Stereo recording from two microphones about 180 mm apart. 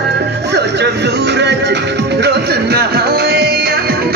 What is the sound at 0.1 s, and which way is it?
Music, 70° right (ahead or behind).